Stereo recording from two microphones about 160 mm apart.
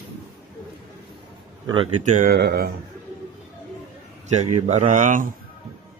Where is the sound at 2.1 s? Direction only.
70° right (ahead or behind).